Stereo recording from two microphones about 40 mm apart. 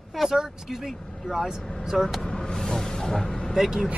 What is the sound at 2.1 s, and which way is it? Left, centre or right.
Vehicle, centre.